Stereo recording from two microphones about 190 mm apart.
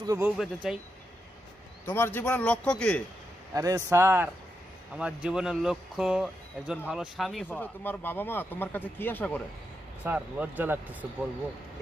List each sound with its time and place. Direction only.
0.0 s speech: 20° right (ahead or behind)
0.6 s speech: centre (ahead or behind)
1.9 s speech: 10° left (ahead or behind)
3.5 s speech: 20° right (ahead or behind); by 7.4 s centre (ahead or behind)
7.4 s speech: 10° left (ahead or behind)
10.0 s speech: 10° right (ahead or behind)